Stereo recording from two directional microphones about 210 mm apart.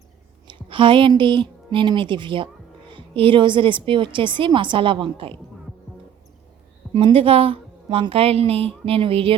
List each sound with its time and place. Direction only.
0.4 s a woman's voice: 25° right (ahead or behind)
6.9 s a woman's voice: 25° right (ahead or behind)